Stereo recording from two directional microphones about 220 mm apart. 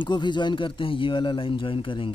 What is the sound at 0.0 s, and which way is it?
Speech, 20° left (ahead or behind).